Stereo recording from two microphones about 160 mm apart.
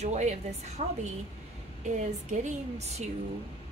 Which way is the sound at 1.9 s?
50° right (ahead or behind).